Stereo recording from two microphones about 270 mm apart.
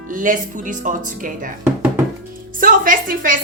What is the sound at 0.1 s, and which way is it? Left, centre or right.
A woman's voice, right.